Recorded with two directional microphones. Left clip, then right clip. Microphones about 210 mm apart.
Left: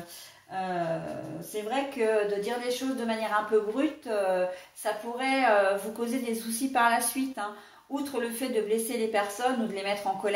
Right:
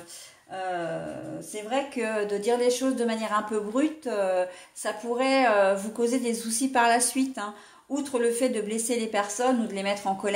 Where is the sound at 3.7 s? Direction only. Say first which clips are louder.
Right 2 dB; 50° right (ahead or behind).